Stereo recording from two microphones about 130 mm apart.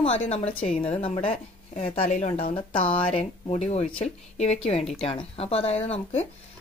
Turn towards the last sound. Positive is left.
turn(degrees=55)  # may be behind; listen again after turning